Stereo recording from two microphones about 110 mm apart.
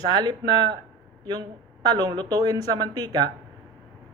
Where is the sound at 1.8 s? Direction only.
40° right (ahead or behind).